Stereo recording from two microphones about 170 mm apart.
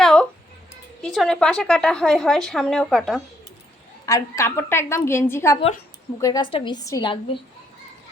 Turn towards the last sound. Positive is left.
turn(degrees=30)  # may be behind; listen again after turning